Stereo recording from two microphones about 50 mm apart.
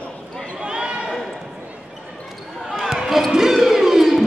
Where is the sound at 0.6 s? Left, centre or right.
Centre.